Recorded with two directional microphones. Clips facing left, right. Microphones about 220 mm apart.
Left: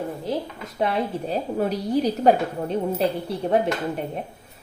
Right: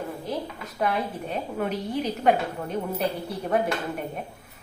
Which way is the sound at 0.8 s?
30° left (ahead or behind).